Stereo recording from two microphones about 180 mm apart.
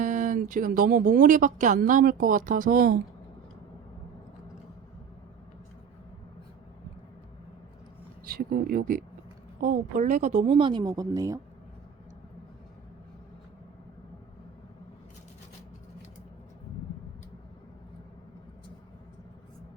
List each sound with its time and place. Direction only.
0.0 s speech: 45° right (ahead or behind)
8.3 s speech: 55° right (ahead or behind); by 11.3 s 20° right (ahead or behind)